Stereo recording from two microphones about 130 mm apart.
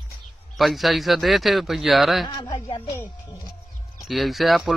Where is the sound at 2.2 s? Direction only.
35° left (ahead or behind).